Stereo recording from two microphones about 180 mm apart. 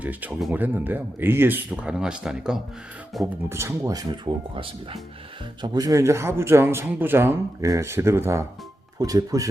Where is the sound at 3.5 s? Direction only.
15° right (ahead or behind).